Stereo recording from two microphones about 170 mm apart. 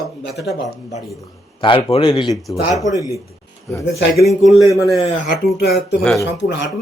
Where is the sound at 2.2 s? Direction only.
Centre (ahead or behind).